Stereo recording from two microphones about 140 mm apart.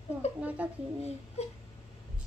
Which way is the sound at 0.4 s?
10° right (ahead or behind).